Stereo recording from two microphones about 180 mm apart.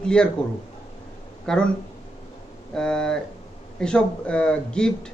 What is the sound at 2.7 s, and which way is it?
Speech, 5° left (ahead or behind).